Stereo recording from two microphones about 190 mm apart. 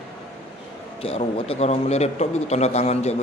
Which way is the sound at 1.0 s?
30° left (ahead or behind).